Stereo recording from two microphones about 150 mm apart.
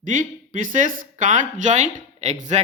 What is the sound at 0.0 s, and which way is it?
Speech, 60° right (ahead or behind).